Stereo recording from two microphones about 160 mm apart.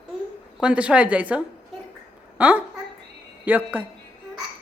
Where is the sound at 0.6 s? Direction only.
5° right (ahead or behind).